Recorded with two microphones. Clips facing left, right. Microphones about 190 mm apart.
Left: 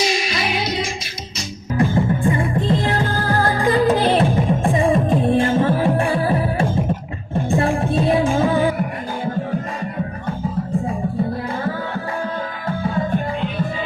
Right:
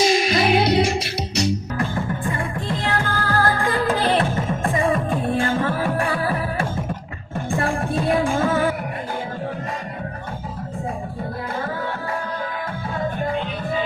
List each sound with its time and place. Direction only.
0.0 s music: 50° right (ahead or behind)
1.8 s music: 25° left (ahead or behind)
4.7 s music: 25° left (ahead or behind)